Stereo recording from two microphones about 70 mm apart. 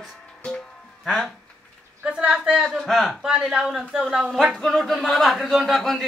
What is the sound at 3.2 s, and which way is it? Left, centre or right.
Speech, centre.